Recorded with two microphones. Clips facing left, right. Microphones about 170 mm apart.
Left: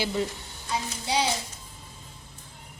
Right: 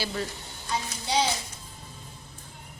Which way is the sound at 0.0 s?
20° left (ahead or behind).